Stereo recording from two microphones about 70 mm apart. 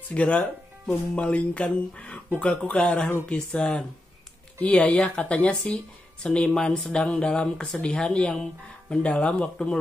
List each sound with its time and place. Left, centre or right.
0.1 s speech: centre